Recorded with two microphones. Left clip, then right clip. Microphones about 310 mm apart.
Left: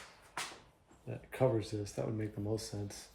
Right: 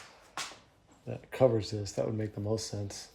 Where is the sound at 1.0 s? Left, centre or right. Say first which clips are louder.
Right 7 dB; right.